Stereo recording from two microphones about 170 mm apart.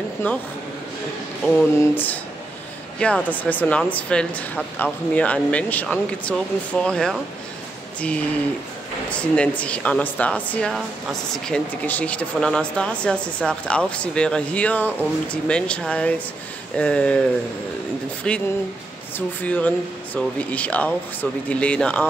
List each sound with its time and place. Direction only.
0.2 s speech: 10° left (ahead or behind)
9.1 s speech: 5° left (ahead or behind)